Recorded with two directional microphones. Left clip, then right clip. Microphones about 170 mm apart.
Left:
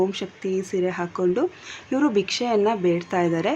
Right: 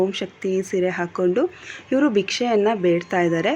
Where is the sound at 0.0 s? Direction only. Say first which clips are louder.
Right 2 dB; 20° right (ahead or behind).